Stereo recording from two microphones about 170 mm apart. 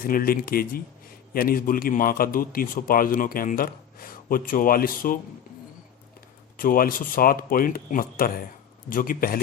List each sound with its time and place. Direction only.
0.0 s a man's voice: 55° left (ahead or behind)
6.6 s a man's voice: 55° left (ahead or behind)